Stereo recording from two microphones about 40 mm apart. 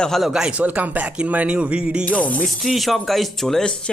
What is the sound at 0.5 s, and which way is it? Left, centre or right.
Speech, right.